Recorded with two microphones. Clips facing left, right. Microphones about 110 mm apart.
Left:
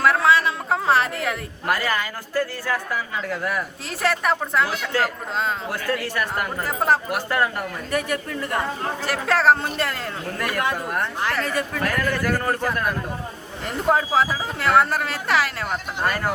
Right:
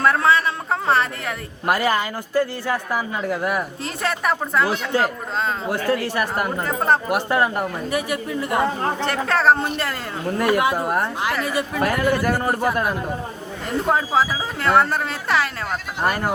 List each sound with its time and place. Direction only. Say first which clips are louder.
0.0 s a sound: even; centre (ahead or behind)
1.6 s speech: right 4 dB; 20° right (ahead or behind)
3.8 s speech: left 2 dB; centre (ahead or behind)
4.7 s speech: right 3 dB; 20° right (ahead or behind)
6.6 s speech: even; 5° left (ahead or behind)
7.1 s speech: right 3 dB; 20° right (ahead or behind)
9.0 s speech: even; centre (ahead or behind)
10.2 s speech: right 9 dB; 25° right (ahead or behind)
10.6 s speech: right 4 dB; 10° right (ahead or behind)
10.8 s speech: right 4 dB; 25° right (ahead or behind)
11.2 s speech: right 1 dB; 10° right (ahead or behind)
13.8 s speech: left 1 dB; centre (ahead or behind)
16.0 s speech: right 2 dB; 15° right (ahead or behind)